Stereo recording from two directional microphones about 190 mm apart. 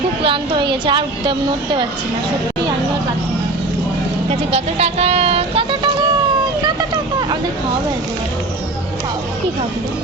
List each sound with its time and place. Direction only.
0.2 s a woman's voice: 25° right (ahead or behind)
4.3 s speech: 35° right (ahead or behind)